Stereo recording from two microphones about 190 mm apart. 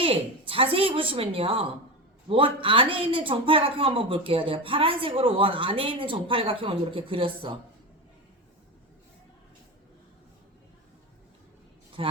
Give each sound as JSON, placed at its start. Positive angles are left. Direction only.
{"t": 0.0, "sound": "a woman's voice", "side_deg": -30}
{"t": 12.0, "sound": "speech", "side_deg": -30}